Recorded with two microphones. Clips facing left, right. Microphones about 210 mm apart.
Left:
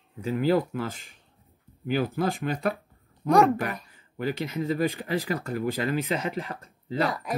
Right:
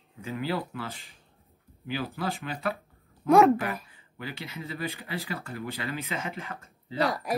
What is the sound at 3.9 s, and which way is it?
Speech, 45° left (ahead or behind).